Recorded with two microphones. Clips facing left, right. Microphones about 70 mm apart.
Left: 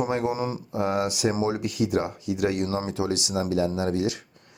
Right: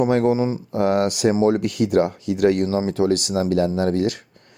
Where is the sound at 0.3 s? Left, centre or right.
Right.